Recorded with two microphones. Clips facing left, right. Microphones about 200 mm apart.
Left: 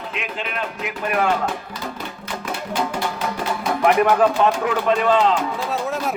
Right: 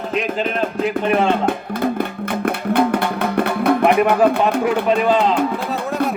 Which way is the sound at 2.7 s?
60° right (ahead or behind).